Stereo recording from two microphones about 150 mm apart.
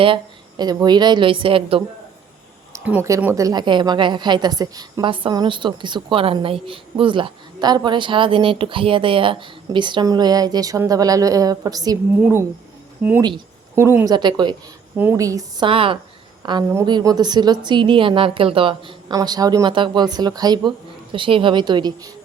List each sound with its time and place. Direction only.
0.0 s a woman's voice: 30° right (ahead or behind)
2.8 s speech: 15° right (ahead or behind)
3.4 s a woman's voice: 30° right (ahead or behind)
14.9 s a woman's voice: 15° right (ahead or behind)